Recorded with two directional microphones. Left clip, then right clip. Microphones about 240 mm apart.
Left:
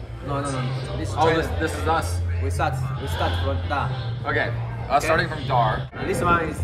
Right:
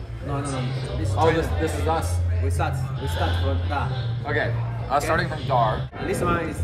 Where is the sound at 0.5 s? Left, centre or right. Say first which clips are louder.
Left 1 dB; centre.